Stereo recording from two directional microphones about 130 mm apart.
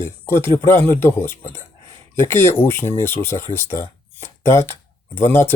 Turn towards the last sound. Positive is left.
turn(degrees=15)  # may be behind; listen again after turning